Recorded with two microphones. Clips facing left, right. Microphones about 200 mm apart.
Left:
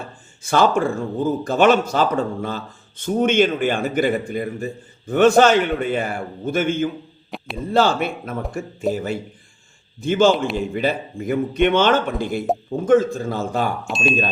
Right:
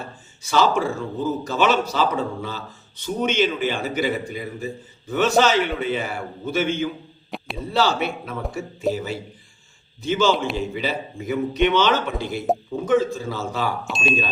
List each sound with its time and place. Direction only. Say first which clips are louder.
0.4 s speech: left 2 dB; 50° left (ahead or behind)
7.3 s a sound: left 1 dB; centre (ahead or behind)
7.7 s speech: left 3 dB; 50° left (ahead or behind)
10.3 s speech: left 2 dB; centre (ahead or behind)
10.6 s speech: left 4 dB; 50° left (ahead or behind)
13.8 s speech: left 3 dB; centre (ahead or behind)